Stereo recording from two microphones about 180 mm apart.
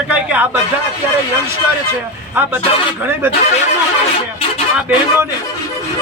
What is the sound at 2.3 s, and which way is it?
Speech, 10° right (ahead or behind).